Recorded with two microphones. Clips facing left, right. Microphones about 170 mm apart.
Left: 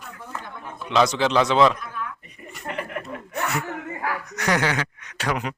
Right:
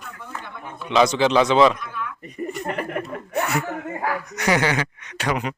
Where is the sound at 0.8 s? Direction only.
Centre (ahead or behind).